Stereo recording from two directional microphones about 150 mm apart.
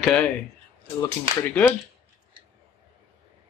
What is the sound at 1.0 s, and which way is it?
Speech, 15° left (ahead or behind).